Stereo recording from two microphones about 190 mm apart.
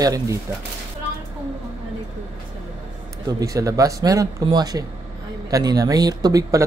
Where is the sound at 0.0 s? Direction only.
20° right (ahead or behind).